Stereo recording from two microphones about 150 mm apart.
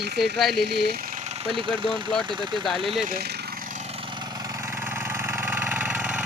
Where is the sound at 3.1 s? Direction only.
90° right.